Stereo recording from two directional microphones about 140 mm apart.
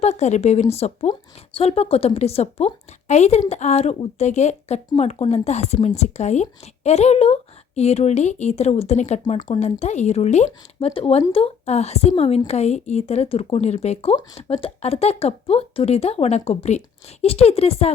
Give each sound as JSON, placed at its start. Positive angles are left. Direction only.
{"t": 0.0, "sound": "speech", "side_deg": 55}